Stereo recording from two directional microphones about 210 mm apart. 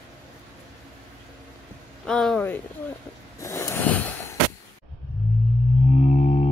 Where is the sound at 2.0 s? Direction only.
5° left (ahead or behind).